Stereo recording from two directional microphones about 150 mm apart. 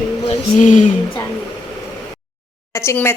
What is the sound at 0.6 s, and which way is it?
Speech, 55° left (ahead or behind).